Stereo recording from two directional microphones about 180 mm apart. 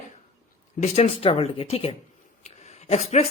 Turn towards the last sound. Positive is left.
turn(degrees=35)  # may be behind; listen again after turning